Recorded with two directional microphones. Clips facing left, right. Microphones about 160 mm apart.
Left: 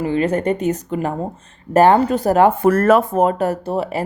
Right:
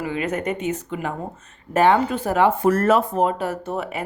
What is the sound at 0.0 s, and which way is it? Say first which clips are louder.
Speech: left 7 dB; 30° left (ahead or behind).